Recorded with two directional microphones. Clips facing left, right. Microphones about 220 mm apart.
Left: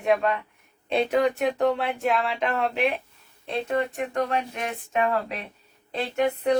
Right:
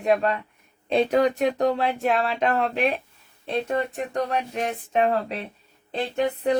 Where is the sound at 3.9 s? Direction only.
35° right (ahead or behind).